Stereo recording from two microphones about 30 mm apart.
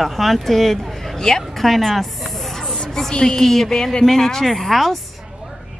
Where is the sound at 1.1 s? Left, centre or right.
Centre.